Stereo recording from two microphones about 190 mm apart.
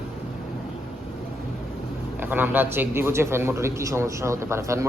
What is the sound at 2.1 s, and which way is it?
A man's voice, 10° right (ahead or behind).